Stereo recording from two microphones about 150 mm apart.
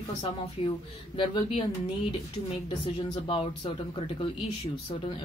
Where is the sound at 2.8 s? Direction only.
35° left (ahead or behind).